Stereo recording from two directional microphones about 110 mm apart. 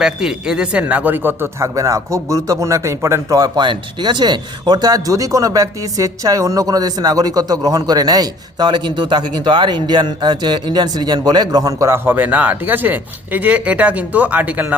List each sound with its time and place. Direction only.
0.0 s speech: 5° right (ahead or behind); by 11.9 s 35° right (ahead or behind)
12.0 s speech: 15° right (ahead or behind)